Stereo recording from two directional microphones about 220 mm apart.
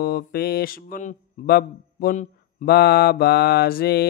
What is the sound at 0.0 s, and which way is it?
Mantra, 45° left (ahead or behind).